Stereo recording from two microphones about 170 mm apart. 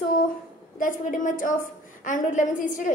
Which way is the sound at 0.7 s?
50° left (ahead or behind).